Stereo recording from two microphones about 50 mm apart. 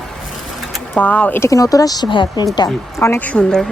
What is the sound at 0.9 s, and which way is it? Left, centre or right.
Speech, left.